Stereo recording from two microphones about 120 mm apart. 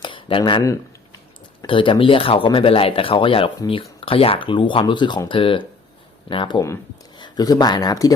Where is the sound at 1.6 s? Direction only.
45° left (ahead or behind).